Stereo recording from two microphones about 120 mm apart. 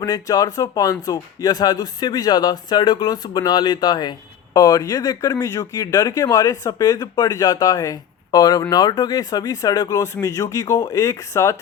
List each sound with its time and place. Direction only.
0.0 s speech: 30° left (ahead or behind)